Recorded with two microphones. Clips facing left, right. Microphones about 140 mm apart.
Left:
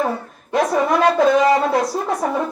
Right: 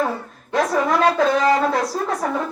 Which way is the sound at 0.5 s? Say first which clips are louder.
Left 2 dB; 15° left (ahead or behind).